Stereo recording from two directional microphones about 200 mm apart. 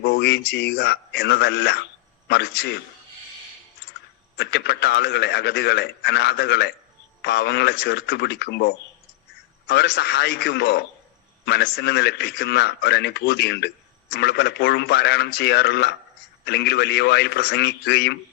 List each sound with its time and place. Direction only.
0.0 s a man's voice: 55° left (ahead or behind)
4.4 s a man's voice: 55° left (ahead or behind)